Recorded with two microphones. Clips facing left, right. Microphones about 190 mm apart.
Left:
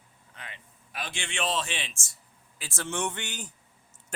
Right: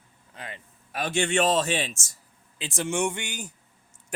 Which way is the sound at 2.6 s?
15° right (ahead or behind).